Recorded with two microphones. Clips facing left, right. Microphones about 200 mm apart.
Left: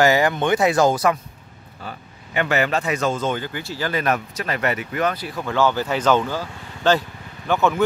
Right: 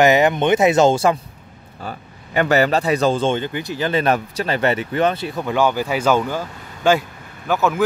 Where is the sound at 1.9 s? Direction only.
40° right (ahead or behind); by 7.8 s 5° right (ahead or behind).